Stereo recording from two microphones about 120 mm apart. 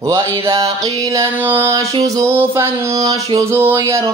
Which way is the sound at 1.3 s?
15° right (ahead or behind).